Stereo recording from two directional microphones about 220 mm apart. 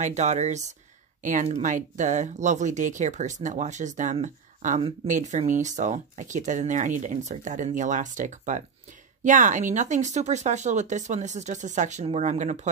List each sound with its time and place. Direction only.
0.0 s speech: 30° right (ahead or behind)